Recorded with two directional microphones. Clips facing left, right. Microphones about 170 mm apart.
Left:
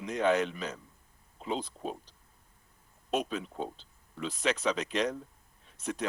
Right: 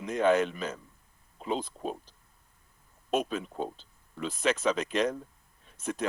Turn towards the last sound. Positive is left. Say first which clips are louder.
# right 2 dB
turn(degrees=-50)  # may be behind; listen again after turning